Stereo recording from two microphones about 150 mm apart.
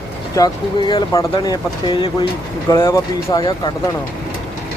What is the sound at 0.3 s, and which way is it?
Speech, 25° left (ahead or behind).